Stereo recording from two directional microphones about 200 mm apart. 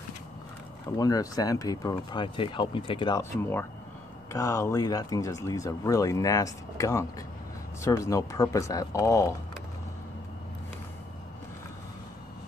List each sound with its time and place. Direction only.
0.9 s speech: 20° left (ahead or behind)